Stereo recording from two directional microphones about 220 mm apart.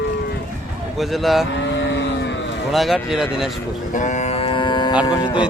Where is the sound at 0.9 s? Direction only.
Centre (ahead or behind).